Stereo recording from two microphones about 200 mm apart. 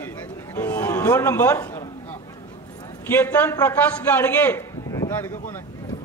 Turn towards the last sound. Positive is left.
turn(degrees=10)  # may be behind; listen again after turning